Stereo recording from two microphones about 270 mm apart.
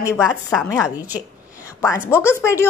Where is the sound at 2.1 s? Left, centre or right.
Centre.